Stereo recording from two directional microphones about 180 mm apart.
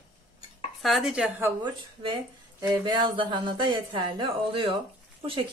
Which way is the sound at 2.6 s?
25° right (ahead or behind).